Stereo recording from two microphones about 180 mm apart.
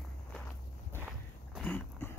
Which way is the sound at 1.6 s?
10° left (ahead or behind).